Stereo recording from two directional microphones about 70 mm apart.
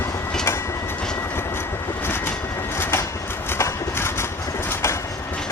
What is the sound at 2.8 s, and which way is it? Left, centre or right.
Train, left.